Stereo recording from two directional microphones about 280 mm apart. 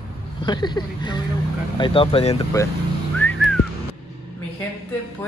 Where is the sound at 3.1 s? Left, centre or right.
Centre.